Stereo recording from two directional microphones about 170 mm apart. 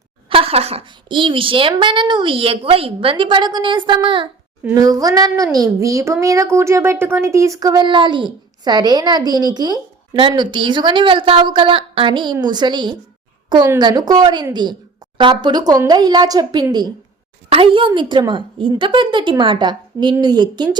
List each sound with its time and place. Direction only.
0.3 s a woman's voice: 35° right (ahead or behind)